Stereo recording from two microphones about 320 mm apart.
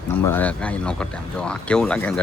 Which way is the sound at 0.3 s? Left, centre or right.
Centre.